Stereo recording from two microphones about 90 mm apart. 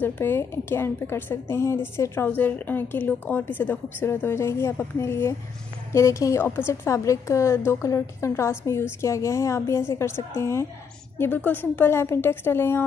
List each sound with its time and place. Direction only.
0.0 s a woman's voice: 25° left (ahead or behind)